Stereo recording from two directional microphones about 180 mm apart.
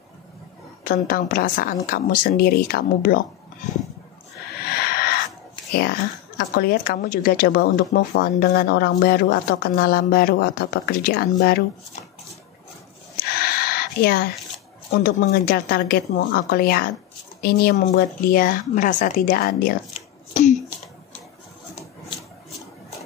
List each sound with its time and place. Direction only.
0.8 s a woman's voice: 50° left (ahead or behind)
4.6 s wheeze: 60° left (ahead or behind)
5.7 s a woman's voice: 60° left (ahead or behind)
13.2 s a sound: 60° left (ahead or behind)
14.9 s a woman's voice: 55° left (ahead or behind)
19.9 s a sound: 40° left (ahead or behind)